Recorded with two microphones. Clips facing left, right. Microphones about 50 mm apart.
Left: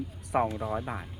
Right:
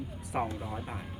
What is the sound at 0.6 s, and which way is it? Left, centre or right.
Speech, centre.